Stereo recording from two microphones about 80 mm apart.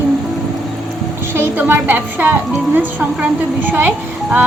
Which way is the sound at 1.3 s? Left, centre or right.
Right.